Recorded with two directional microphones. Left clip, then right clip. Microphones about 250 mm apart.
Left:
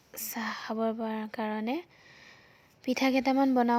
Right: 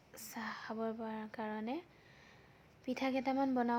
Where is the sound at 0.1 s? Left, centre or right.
Left.